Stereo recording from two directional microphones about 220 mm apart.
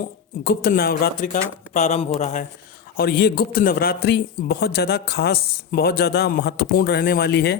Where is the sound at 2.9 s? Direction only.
45° left (ahead or behind).